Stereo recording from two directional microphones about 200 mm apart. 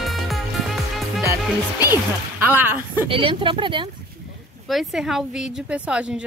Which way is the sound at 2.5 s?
10° right (ahead or behind).